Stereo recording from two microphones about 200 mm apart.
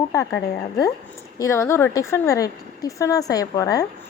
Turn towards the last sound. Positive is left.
turn(degrees=15)  # may be behind; listen again after turning